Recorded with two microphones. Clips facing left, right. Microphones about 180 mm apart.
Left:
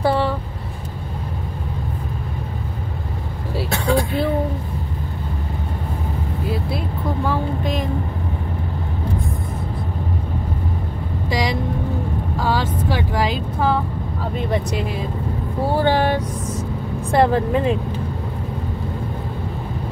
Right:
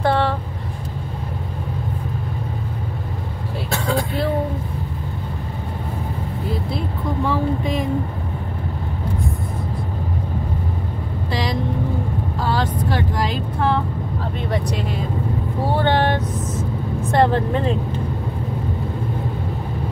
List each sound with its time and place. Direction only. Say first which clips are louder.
0.0 s vehicle: even; 10° left (ahead or behind)
7.2 s vehicle: right 3 dB; centre (ahead or behind)
11.2 s vehicle: left 2 dB; 10° left (ahead or behind)
12.5 s vehicle: even; 10° left (ahead or behind)
15.8 s vehicle: left 1 dB; 10° left (ahead or behind)
17.1 s speech: left 1 dB; 10° left (ahead or behind)